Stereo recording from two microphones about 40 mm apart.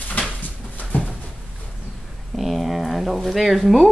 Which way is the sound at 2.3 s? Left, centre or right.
Centre.